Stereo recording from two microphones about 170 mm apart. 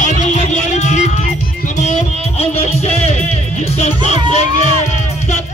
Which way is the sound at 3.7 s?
40° left (ahead or behind).